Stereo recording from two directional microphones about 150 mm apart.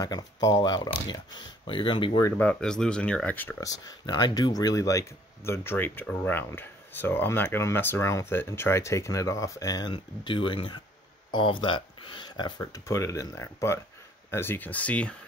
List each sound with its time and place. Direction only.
0.0 s speech: 25° left (ahead or behind)
2.3 s speech: 5° left (ahead or behind)
3.6 s speech: 25° left (ahead or behind); by 15.1 s 10° left (ahead or behind)